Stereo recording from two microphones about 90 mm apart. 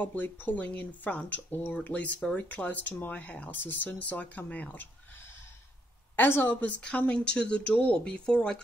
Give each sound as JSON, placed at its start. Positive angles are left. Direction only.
{"t": 0.0, "sound": "speech", "side_deg": 20}